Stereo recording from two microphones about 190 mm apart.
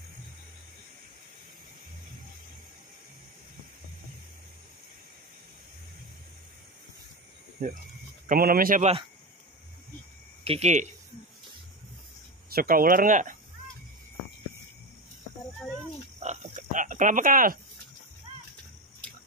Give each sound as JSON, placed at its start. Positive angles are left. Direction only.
{"t": 8.3, "sound": "speech", "side_deg": -50}
{"t": 10.4, "sound": "speech", "side_deg": -35}
{"t": 12.5, "sound": "speech", "side_deg": -50}
{"t": 16.2, "sound": "pig", "side_deg": -40}